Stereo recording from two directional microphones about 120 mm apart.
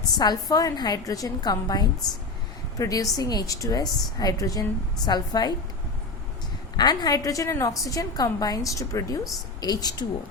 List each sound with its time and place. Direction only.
0.2 s a woman's voice: 35° left (ahead or behind)
6.7 s a woman's voice: 35° left (ahead or behind)